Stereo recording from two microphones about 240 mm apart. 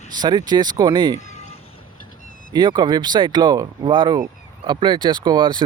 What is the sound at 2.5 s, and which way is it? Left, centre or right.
Speech, centre.